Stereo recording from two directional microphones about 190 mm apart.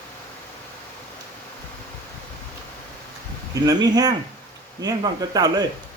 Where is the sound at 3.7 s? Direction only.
20° right (ahead or behind).